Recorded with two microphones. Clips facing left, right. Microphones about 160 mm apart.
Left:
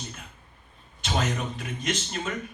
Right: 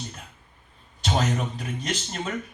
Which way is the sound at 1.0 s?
35° right (ahead or behind).